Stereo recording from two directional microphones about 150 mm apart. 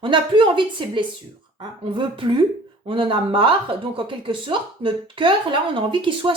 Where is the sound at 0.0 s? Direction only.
35° right (ahead or behind).